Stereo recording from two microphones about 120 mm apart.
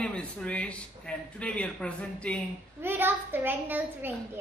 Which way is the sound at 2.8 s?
20° right (ahead or behind).